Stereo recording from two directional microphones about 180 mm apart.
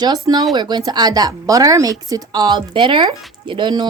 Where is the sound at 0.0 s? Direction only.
25° right (ahead or behind).